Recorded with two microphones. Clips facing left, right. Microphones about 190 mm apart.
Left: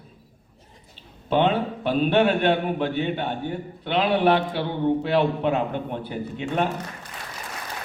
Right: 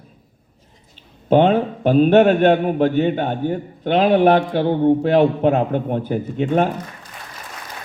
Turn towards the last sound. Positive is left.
turn(degrees=-45)  # may be behind; listen again after turning